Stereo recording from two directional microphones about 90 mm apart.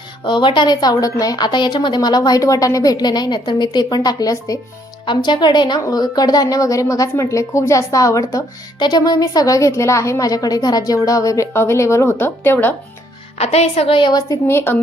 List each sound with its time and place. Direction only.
0.3 s a woman's voice: 65° left (ahead or behind); by 4.6 s 40° left (ahead or behind)
5.0 s a woman's voice: 55° left (ahead or behind); by 8.4 s 40° left (ahead or behind)
8.8 s a woman's voice: 50° left (ahead or behind)
11.5 s a woman's voice: 30° left (ahead or behind)
13.7 s a woman's voice: 85° left
14.1 s a woman's voice: 45° left (ahead or behind)
14.4 s a woman's voice: 25° left (ahead or behind)